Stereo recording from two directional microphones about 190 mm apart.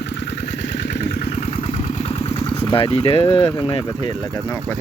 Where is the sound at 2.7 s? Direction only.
30° left (ahead or behind).